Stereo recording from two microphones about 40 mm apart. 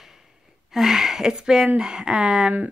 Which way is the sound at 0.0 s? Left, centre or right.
Centre.